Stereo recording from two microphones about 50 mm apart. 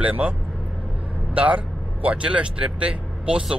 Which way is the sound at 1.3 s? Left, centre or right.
Right.